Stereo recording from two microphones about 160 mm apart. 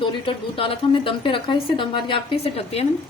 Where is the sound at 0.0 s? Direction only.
35° left (ahead or behind).